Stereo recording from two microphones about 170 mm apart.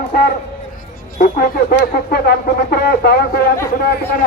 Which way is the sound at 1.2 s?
70° left (ahead or behind).